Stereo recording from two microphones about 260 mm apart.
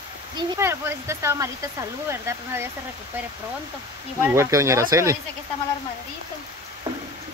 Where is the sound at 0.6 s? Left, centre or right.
Centre.